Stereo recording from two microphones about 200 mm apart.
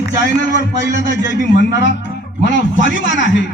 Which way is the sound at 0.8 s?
60° left (ahead or behind).